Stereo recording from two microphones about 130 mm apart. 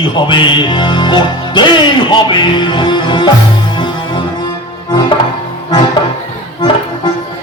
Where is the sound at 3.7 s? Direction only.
35° left (ahead or behind).